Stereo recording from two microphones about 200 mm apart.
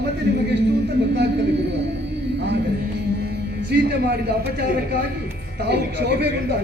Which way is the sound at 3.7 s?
55° right (ahead or behind).